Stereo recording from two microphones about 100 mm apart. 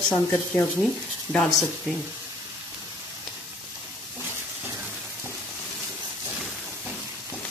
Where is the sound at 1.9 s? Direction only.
5° right (ahead or behind).